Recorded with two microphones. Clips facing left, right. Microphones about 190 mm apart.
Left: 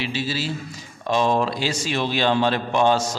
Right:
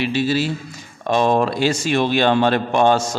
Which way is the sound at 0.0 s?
55° right (ahead or behind).